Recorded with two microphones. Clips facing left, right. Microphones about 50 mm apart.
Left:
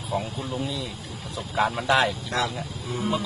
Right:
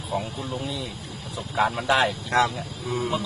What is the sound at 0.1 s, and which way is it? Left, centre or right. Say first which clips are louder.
A man's voice: even; centre.